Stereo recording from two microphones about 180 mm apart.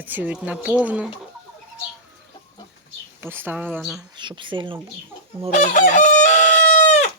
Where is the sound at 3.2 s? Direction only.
10° right (ahead or behind).